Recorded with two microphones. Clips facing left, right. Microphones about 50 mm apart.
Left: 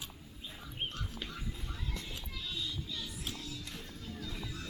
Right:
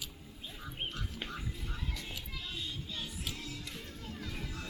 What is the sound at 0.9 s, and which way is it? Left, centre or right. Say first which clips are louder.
Music: right 1 dB; right.